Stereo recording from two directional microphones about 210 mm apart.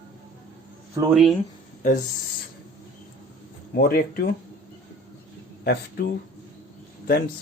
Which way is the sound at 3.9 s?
45° left (ahead or behind).